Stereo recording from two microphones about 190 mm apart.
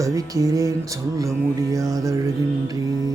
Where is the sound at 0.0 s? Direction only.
20° right (ahead or behind).